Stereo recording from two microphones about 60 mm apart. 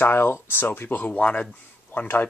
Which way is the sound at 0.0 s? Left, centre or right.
Left.